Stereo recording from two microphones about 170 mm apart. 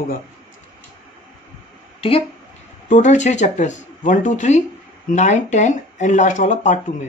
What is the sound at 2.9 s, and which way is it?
Speech, 45° left (ahead or behind).